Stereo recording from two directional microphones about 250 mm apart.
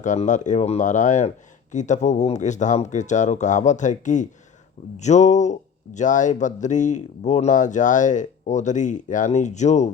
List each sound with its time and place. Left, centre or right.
0.0 s speech: left